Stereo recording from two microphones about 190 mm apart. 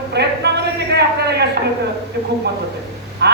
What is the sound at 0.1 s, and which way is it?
Speech, 60° right (ahead or behind).